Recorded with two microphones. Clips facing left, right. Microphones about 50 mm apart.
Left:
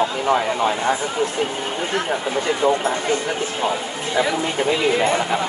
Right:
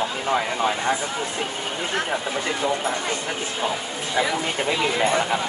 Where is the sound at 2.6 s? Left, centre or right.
Left.